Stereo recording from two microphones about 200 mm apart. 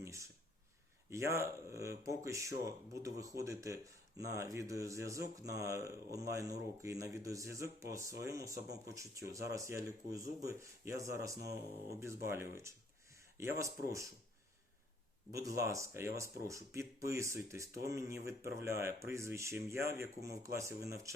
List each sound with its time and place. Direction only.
0.0 s a sound: 15° right (ahead or behind)
1.1 s speech: 15° right (ahead or behind)
15.3 s speech: 15° right (ahead or behind)